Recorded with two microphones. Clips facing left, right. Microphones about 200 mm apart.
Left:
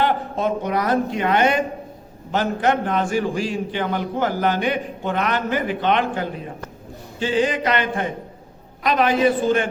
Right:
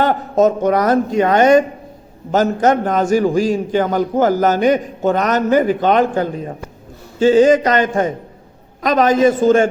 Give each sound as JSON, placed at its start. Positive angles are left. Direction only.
{"t": 0.0, "sound": "a man's voice", "side_deg": -45}